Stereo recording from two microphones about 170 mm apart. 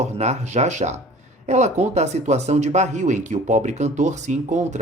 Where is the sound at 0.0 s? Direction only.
40° right (ahead or behind).